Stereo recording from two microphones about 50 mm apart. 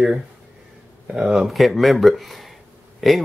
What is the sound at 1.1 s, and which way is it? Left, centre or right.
Speech, centre.